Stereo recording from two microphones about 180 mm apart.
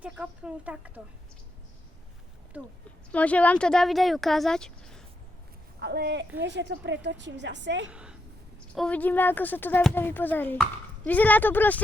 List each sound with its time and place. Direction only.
0.0 s speech: 5° right (ahead or behind)
3.1 s speech: 5° left (ahead or behind)
5.8 s a woman's voice: 65° right (ahead or behind)
6.4 s a woman's voice: 75° right (ahead or behind)
7.9 s a sound: 5° right (ahead or behind)
8.7 s speech: 5° left (ahead or behind)